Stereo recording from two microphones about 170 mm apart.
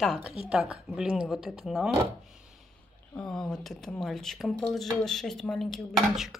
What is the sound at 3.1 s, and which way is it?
Speech, 5° left (ahead or behind).